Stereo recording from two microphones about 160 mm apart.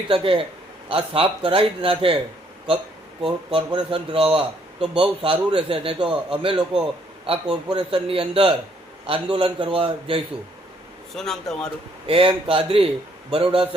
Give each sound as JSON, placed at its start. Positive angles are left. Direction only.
{"t": 0.1, "sound": "a man's voice", "side_deg": -35}
{"t": 3.2, "sound": "a man's voice", "side_deg": -35}
{"t": 11.1, "sound": "speech", "side_deg": 0}
{"t": 12.0, "sound": "a man's voice", "side_deg": -35}